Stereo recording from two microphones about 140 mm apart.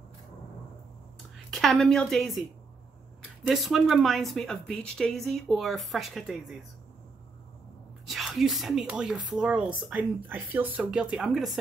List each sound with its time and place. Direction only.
1.5 s a woman's voice: centre (ahead or behind)
3.4 s speech: centre (ahead or behind)
8.1 s speech: centre (ahead or behind)